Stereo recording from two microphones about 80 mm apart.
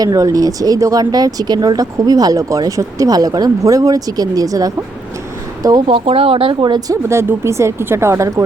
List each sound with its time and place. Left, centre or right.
0.0 s speech: right
6.4 s speech: right
7.1 s speech: right